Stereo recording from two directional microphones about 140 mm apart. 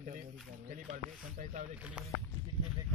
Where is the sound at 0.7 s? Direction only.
60° right (ahead or behind).